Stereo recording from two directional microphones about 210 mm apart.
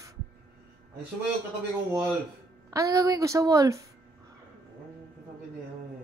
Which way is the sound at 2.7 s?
15° right (ahead or behind).